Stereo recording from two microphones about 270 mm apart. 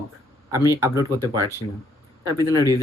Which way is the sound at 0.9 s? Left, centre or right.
Centre.